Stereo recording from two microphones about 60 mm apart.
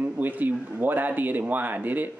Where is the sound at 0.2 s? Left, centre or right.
Right.